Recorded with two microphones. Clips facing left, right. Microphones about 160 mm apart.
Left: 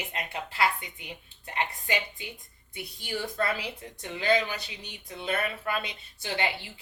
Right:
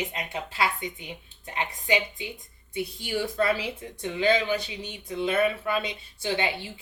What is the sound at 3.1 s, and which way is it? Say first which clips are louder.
Speech: right 4 dB; 20° right (ahead or behind).